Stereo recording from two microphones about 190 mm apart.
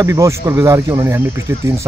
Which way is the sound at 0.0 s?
15° right (ahead or behind).